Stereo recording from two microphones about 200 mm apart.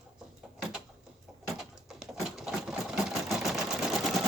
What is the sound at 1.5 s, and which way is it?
Sewing machine, centre (ahead or behind).